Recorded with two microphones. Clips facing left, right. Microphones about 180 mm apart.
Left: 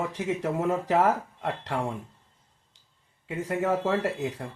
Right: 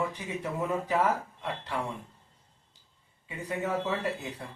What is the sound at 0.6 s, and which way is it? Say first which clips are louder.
Speech: left 4 dB; 80° left.